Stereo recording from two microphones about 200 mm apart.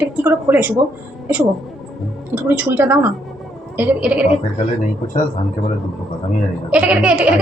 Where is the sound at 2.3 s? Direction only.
10° right (ahead or behind).